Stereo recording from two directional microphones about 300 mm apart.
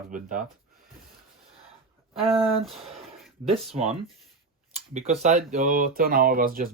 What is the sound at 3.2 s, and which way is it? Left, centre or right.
Speech, centre.